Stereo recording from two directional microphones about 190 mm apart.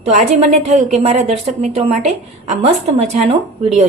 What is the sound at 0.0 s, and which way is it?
A woman's voice, 35° right (ahead or behind).